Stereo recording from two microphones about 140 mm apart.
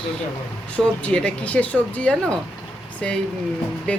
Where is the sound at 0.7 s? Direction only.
10° left (ahead or behind).